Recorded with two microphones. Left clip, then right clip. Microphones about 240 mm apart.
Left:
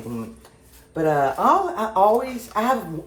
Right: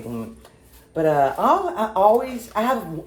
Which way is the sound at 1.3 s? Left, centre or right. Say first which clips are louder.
Even; left.